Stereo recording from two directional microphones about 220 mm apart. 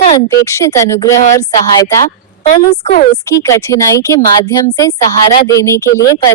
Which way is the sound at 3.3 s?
15° left (ahead or behind).